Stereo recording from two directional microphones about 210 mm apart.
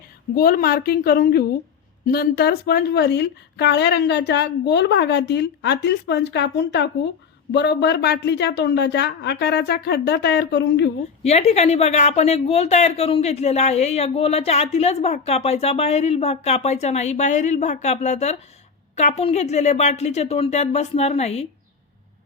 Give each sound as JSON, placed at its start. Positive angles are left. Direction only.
{"t": 0.3, "sound": "a woman's voice", "side_deg": 45}
{"t": 11.2, "sound": "speech", "side_deg": 30}